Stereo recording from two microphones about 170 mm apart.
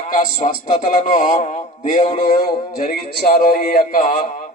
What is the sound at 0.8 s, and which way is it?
A man's voice, 55° left (ahead or behind).